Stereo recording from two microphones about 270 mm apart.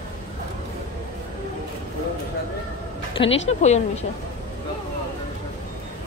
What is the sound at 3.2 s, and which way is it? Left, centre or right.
Speech, left.